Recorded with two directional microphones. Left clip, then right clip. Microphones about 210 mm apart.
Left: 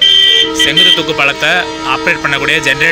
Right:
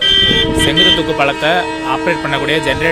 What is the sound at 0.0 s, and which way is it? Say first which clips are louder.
Vehicle: left 4 dB; 35° right (ahead or behind).